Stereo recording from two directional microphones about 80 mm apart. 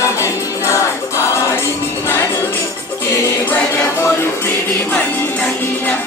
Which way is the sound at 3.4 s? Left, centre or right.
Left.